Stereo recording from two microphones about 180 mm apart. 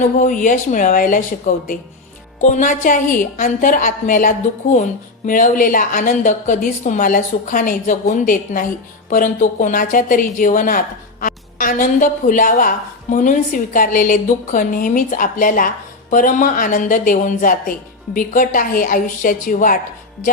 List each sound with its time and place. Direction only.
0.2 s a woman's voice: 45° left (ahead or behind)